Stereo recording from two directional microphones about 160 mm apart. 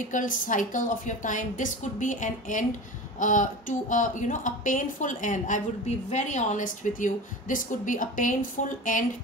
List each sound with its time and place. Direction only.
0.0 s a woman's voice: 55° left (ahead or behind)